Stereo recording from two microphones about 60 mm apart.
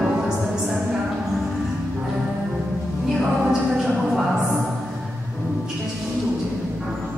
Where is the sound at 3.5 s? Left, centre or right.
Centre.